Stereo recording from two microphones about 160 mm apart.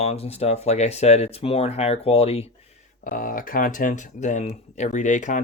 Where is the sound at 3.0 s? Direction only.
60° left (ahead or behind).